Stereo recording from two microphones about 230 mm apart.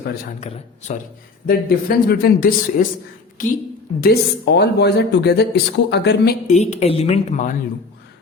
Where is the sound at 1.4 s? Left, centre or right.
Left.